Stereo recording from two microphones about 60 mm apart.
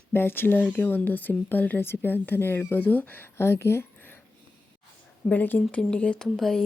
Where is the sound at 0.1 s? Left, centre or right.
Left.